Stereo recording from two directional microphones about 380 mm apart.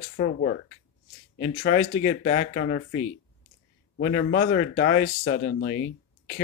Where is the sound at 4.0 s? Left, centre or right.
Left.